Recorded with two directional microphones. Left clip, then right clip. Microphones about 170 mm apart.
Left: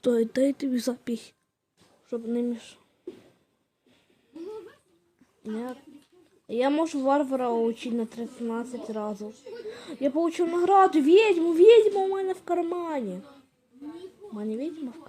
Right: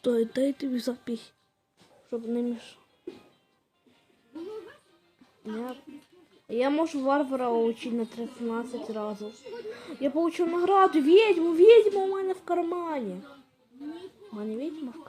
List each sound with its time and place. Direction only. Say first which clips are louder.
0.0 s speech: left 2 dB; 20° left (ahead or behind)
5.4 s speech: left 1 dB; 25° left (ahead or behind)